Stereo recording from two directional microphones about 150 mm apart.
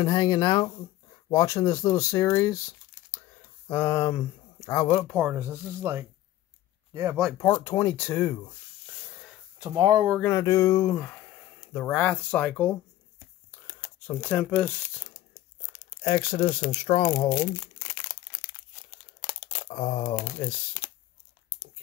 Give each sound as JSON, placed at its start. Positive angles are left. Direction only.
{"t": 0.0, "sound": "speech", "side_deg": 30}
{"t": 3.6, "sound": "speech", "side_deg": 15}
{"t": 5.3, "sound": "speech", "side_deg": -15}
{"t": 7.6, "sound": "speech", "side_deg": 20}
{"t": 9.6, "sound": "speech", "side_deg": -25}
{"t": 10.2, "sound": "speech", "side_deg": 20}
{"t": 13.7, "sound": "crumpling", "side_deg": 10}
{"t": 16.0, "sound": "speech", "side_deg": 35}
{"t": 19.7, "sound": "speech", "side_deg": 40}